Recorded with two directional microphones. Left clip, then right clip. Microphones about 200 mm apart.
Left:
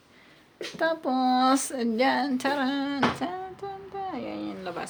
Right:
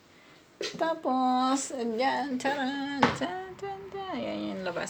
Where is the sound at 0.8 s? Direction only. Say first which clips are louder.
Left 2 dB; 25° left (ahead or behind).